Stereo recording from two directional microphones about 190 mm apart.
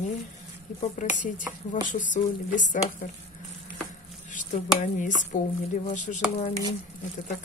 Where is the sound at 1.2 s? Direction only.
45° left (ahead or behind).